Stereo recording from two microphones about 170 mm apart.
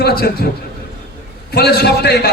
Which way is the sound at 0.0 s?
65° left (ahead or behind).